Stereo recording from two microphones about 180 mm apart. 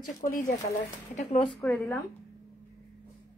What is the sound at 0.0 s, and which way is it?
Speech, 50° left (ahead or behind).